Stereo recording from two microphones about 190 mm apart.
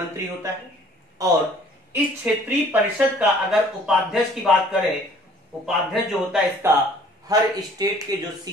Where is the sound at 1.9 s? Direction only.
5° right (ahead or behind).